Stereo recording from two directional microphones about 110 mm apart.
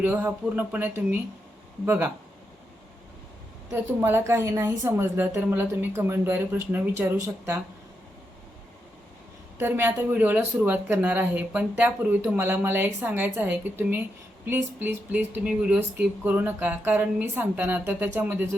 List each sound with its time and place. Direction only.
0.0 s a woman's voice: 15° right (ahead or behind)
3.7 s a woman's voice: 20° right (ahead or behind)
9.6 s speech: 20° right (ahead or behind)